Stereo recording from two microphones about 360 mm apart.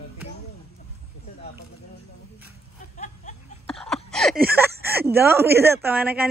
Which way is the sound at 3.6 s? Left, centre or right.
Centre.